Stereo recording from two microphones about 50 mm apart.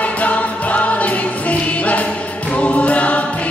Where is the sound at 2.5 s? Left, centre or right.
Left.